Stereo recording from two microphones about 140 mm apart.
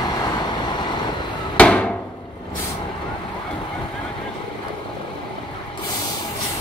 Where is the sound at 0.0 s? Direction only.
30° left (ahead or behind).